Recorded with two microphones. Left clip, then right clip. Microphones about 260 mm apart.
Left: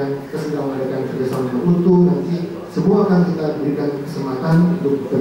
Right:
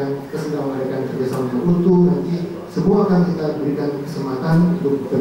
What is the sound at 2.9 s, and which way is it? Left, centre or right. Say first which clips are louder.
A man's voice: left 1 dB; centre.